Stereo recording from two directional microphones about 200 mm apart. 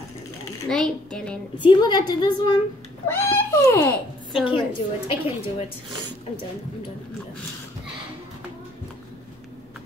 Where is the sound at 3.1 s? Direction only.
15° left (ahead or behind).